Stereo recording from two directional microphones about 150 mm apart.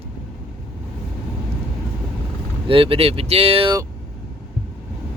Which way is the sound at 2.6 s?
35° right (ahead or behind).